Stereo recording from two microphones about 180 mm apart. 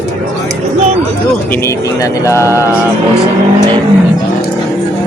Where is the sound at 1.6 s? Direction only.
15° left (ahead or behind).